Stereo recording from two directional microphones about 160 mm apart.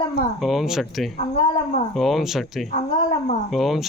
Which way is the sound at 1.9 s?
Centre (ahead or behind).